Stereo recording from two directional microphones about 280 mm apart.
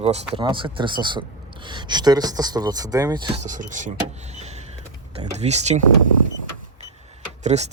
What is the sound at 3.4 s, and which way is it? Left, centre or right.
Speech, right.